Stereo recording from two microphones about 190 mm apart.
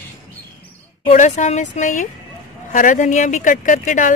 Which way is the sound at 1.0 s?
40° left (ahead or behind).